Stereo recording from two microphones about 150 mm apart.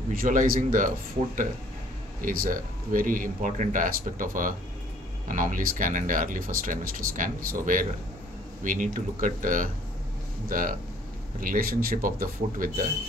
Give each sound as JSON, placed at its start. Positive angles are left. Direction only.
{"t": 0.1, "sound": "speech", "side_deg": -65}